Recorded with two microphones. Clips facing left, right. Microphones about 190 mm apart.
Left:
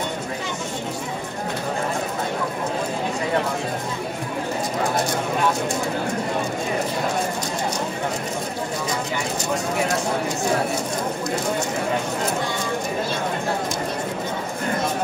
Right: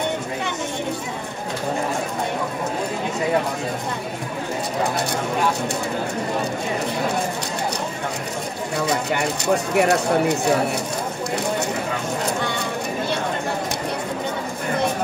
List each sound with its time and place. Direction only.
9.8 s speech: 65° right (ahead or behind)